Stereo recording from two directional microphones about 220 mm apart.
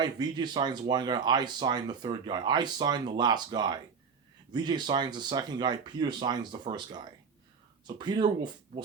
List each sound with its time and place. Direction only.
0.0 s speech: 20° right (ahead or behind)